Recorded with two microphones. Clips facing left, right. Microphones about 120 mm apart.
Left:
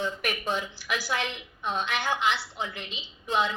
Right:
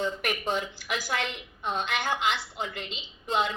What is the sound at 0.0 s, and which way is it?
Speech, 20° right (ahead or behind).